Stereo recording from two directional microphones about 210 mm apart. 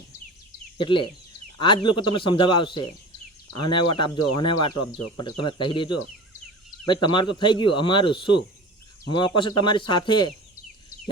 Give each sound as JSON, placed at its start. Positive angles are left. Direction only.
{"t": 0.8, "sound": "speech", "side_deg": 25}